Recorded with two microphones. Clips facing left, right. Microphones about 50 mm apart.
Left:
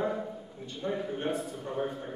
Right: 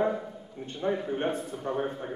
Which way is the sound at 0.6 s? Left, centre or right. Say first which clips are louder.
Right 4 dB; right.